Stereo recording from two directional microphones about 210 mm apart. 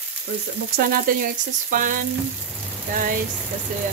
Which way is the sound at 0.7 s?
40° right (ahead or behind).